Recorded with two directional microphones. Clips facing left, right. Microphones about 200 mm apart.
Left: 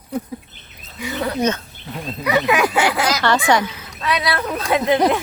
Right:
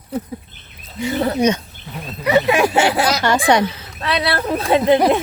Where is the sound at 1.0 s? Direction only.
30° right (ahead or behind).